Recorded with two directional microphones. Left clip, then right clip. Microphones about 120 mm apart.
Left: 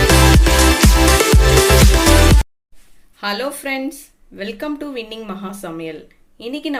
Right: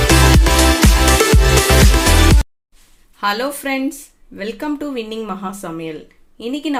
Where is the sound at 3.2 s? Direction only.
65° right (ahead or behind).